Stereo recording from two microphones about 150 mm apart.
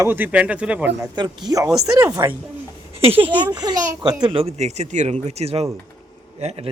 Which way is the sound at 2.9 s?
40° right (ahead or behind).